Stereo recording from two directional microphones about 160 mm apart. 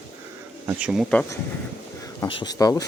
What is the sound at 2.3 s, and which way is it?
Speech, 30° left (ahead or behind).